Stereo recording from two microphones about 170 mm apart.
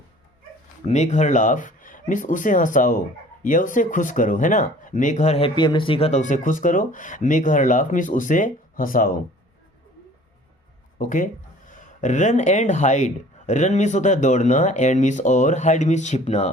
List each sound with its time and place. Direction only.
0.9 s speech: 40° left (ahead or behind)
5.5 s speech: 30° left (ahead or behind); by 9.2 s 55° left (ahead or behind)
10.9 s speech: 50° left (ahead or behind)